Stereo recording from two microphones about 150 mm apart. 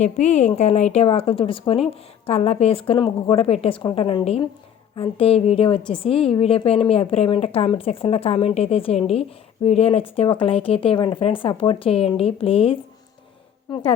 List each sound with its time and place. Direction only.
0.0 s a woman's voice: 50° left (ahead or behind)